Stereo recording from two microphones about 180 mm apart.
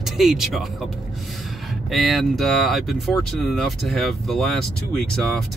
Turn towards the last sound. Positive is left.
turn(degrees=5)  # may be behind; listen again after turning